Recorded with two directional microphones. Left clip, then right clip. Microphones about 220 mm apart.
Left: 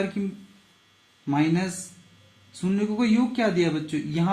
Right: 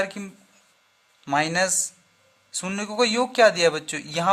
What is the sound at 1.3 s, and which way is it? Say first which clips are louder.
A man's voice: right 4 dB; 50° right (ahead or behind).